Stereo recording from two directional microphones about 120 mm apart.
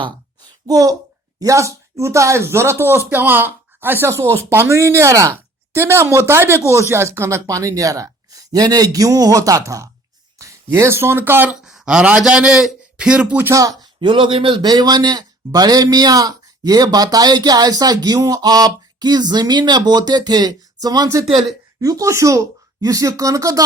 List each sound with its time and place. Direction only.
0.7 s speech: 30° right (ahead or behind)
11.5 s a man's voice: 5° right (ahead or behind)
13.5 s speech: 30° right (ahead or behind)
14.0 s speech: 45° right (ahead or behind); by 23.6 s 30° right (ahead or behind)